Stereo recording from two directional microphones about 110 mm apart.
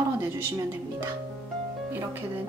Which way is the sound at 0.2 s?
25° right (ahead or behind).